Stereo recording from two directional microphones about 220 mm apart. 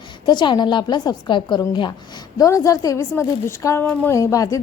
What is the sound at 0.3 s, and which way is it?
A woman's voice, 20° left (ahead or behind).